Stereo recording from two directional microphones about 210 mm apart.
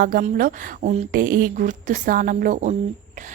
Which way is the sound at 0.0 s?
45° right (ahead or behind).